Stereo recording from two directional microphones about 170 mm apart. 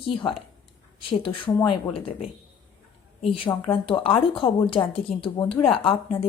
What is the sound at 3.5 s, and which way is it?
Speech, 20° left (ahead or behind).